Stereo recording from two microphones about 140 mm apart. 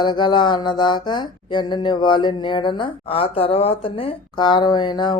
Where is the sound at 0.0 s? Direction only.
35° left (ahead or behind).